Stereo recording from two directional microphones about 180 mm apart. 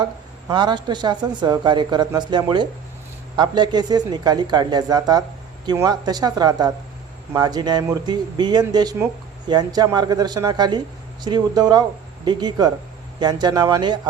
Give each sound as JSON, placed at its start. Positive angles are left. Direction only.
{"t": 0.0, "sound": "speech", "side_deg": -25}